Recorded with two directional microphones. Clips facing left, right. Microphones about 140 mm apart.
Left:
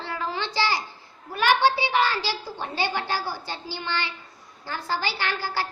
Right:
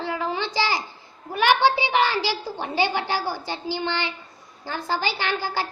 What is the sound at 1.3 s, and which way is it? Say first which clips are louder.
A child's voice: right 2 dB; 20° right (ahead or behind).